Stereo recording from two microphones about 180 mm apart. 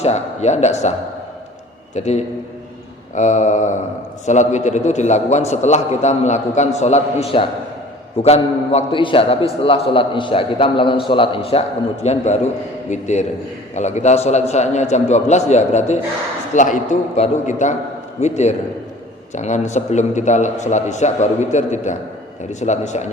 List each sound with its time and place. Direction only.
0.0 s a man's voice: 40° left (ahead or behind)
2.0 s a man's voice: 40° left (ahead or behind)